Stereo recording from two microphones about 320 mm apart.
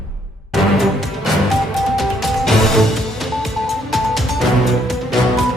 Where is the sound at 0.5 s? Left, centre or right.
Centre.